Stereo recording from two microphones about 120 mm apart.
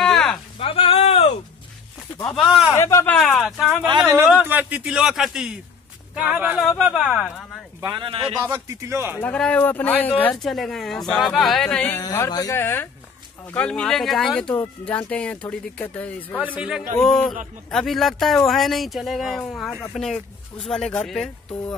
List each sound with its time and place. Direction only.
0.0 s a sound: 5° left (ahead or behind)
0.6 s a sound: 50° left (ahead or behind)
2.3 s speech: centre (ahead or behind)
2.7 s a sound: 20° left (ahead or behind)
3.1 s a sound: 5° left (ahead or behind)
4.3 s speech: 10° right (ahead or behind)
8.0 s speech: 50° right (ahead or behind)
8.5 s a man's voice: 25° right (ahead or behind)
9.2 s speech: 10° left (ahead or behind)
10.3 s speech: centre (ahead or behind)
12.0 s speech: 30° left (ahead or behind)
12.5 s speech: 20° left (ahead or behind)
16.3 s speech: 10° right (ahead or behind)
16.7 s speech: centre (ahead or behind)